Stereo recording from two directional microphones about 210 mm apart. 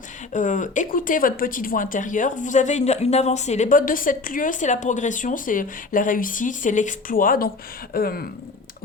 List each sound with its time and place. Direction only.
0.3 s speech: 35° left (ahead or behind)